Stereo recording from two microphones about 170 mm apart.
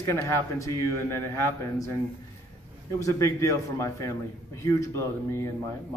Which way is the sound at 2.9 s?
20° left (ahead or behind).